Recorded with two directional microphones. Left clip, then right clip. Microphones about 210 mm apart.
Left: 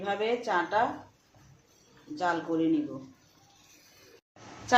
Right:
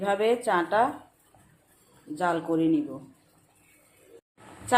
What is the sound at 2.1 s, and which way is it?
Speech, 30° right (ahead or behind).